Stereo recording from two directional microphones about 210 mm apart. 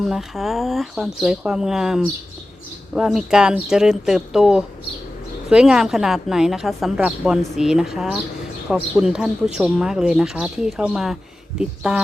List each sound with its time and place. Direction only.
0.0 s a woman's voice: centre (ahead or behind)